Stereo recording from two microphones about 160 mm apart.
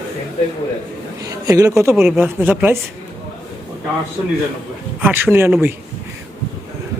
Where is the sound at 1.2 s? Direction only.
20° right (ahead or behind).